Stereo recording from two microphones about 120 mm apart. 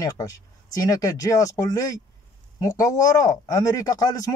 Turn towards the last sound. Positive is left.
turn(degrees=30)  # may be behind; listen again after turning